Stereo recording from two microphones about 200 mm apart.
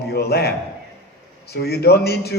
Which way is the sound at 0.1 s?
55° left (ahead or behind).